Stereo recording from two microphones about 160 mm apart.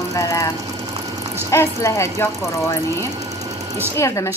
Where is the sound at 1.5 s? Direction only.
15° left (ahead or behind).